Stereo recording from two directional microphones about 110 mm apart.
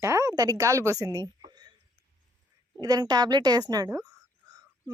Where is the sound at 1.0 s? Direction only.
35° right (ahead or behind).